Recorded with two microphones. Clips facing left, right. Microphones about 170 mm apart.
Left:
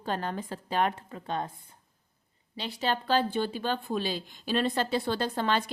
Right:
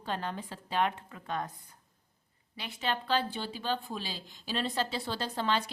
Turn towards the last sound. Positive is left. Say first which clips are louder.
# left 3 dB
turn(degrees=50)  # may be behind; listen again after turning